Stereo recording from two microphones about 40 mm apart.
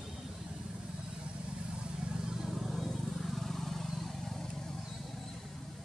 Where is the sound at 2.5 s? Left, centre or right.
Centre.